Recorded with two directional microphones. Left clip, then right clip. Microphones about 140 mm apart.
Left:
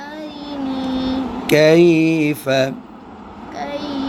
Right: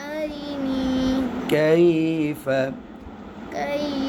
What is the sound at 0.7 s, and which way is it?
Vehicle, 90° right.